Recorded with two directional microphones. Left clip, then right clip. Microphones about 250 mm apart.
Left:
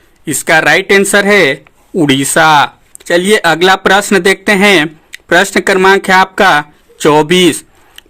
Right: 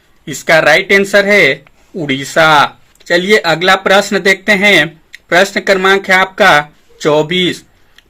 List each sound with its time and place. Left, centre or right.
0.4 s speech: left